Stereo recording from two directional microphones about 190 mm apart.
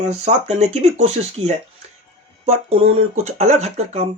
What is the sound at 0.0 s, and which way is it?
Speech, 35° right (ahead or behind).